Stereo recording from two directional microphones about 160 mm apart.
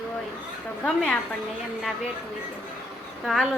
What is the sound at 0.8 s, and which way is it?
Speech, 5° left (ahead or behind).